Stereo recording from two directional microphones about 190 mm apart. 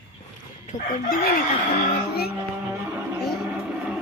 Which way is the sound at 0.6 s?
45° left (ahead or behind).